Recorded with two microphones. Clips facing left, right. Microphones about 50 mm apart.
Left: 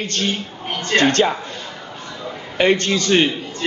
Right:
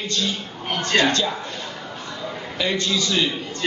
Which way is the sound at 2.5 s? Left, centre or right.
Left.